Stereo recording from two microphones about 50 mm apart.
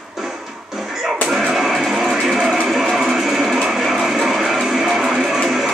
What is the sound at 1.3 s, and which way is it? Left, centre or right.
Music, centre.